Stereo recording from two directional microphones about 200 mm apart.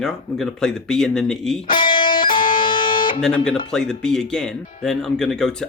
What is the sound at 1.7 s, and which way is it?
Music, 25° left (ahead or behind).